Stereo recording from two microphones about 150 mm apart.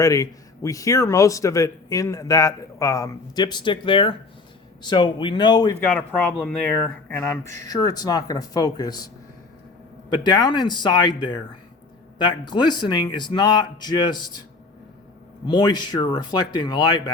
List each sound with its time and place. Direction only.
0.0 s speech: 20° left (ahead or behind)
5.8 s speech: 10° left (ahead or behind); by 9.0 s 25° left (ahead or behind)
10.1 s speech: 30° left (ahead or behind)
15.4 s speech: 30° left (ahead or behind)